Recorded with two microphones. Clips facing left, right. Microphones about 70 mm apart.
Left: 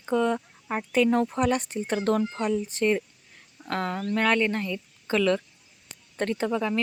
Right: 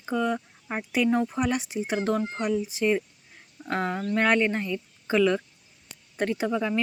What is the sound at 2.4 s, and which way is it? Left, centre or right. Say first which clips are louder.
Speech: right 1 dB; centre.